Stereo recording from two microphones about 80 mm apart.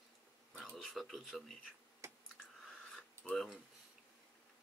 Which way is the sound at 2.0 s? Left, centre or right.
Right.